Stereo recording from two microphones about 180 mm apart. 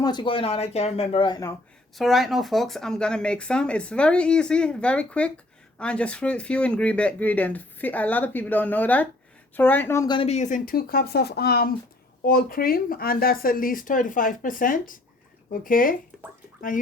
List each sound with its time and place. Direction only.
0.0 s speech: 25° left (ahead or behind)
2.0 s speech: centre (ahead or behind); by 10.2 s 15° left (ahead or behind)
10.2 s speech: 35° left (ahead or behind)